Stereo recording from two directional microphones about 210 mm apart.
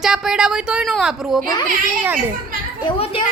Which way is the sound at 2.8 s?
25° left (ahead or behind).